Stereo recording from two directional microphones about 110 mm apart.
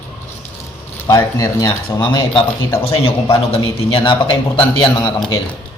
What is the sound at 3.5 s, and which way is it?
A man's voice, 60° left (ahead or behind).